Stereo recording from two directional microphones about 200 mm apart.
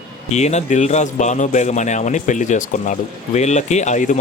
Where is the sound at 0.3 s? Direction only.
35° left (ahead or behind).